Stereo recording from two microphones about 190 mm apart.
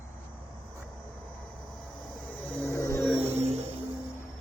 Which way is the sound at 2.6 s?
15° left (ahead or behind).